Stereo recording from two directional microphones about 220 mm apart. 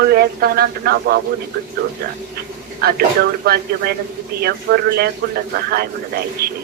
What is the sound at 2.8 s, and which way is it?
Speech, 45° right (ahead or behind).